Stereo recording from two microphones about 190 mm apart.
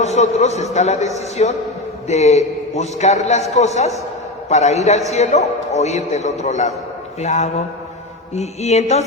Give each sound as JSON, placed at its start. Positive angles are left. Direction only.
{"t": 0.0, "sound": "a man's voice", "side_deg": 35}